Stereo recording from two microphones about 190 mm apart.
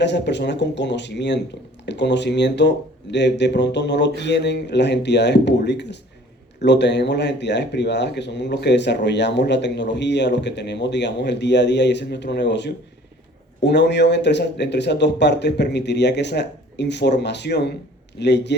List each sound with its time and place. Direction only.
0.0 s speech: 65° left (ahead or behind)